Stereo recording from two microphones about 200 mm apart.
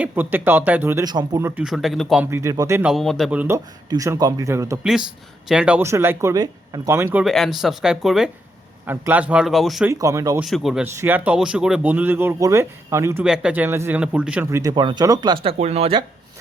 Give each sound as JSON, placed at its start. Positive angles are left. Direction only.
{"t": 0.0, "sound": "speech", "side_deg": -10}
{"t": 2.9, "sound": "speech", "side_deg": 0}
{"t": 4.8, "sound": "speech", "side_deg": -5}
{"t": 9.9, "sound": "speech", "side_deg": -15}
{"t": 10.4, "sound": "speech", "side_deg": 0}
{"t": 15.5, "sound": "speech", "side_deg": -30}